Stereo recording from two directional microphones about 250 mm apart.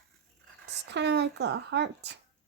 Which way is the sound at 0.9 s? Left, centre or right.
Right.